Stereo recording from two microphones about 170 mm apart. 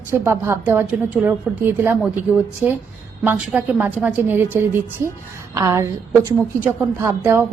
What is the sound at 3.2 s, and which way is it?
A woman's voice, 10° right (ahead or behind).